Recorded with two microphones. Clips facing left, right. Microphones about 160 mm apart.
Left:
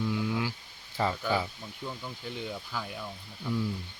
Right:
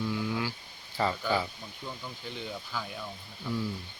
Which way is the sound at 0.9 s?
5° left (ahead or behind).